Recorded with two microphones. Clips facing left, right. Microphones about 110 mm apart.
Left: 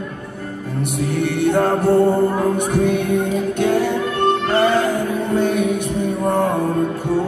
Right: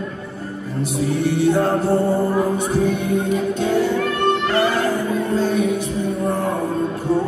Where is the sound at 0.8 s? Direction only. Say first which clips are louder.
Right 1 dB; 60° left (ahead or behind).